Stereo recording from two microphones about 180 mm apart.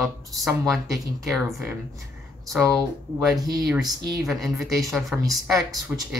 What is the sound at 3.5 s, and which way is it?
Speech, centre (ahead or behind).